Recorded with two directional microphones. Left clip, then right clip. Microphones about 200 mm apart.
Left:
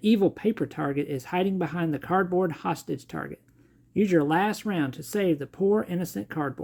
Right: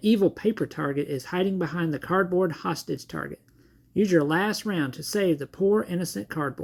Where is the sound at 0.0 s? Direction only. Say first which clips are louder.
Right 1 dB; 5° left (ahead or behind).